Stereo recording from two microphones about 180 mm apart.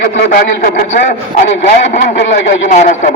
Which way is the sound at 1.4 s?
40° left (ahead or behind).